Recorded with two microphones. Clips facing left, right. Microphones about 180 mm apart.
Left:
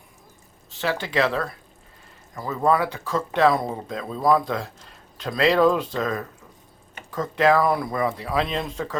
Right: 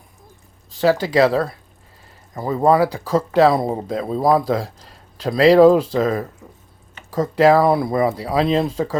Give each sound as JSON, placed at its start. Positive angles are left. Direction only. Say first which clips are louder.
{"t": 0.8, "sound": "speech", "louder": "right 8 dB", "side_deg": -35}